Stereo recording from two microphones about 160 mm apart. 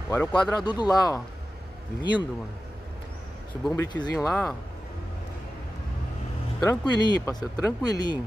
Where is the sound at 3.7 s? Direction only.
20° left (ahead or behind).